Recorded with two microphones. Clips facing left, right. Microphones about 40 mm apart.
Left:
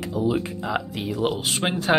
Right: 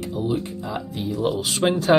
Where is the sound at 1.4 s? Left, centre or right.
Left.